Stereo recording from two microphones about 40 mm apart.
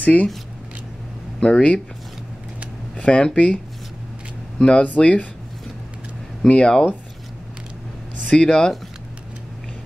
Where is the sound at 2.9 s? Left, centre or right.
Left.